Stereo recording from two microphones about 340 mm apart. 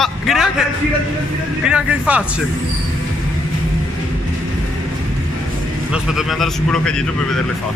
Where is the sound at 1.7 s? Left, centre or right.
Centre.